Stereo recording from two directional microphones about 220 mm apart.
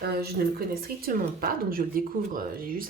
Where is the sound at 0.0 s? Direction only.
45° right (ahead or behind).